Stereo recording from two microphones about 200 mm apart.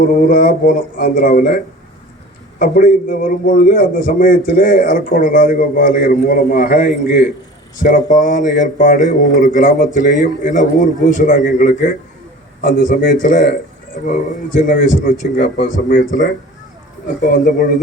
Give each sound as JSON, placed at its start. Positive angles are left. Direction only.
{"t": 0.1, "sound": "a man's voice", "side_deg": 45}
{"t": 14.7, "sound": "a man's voice", "side_deg": 40}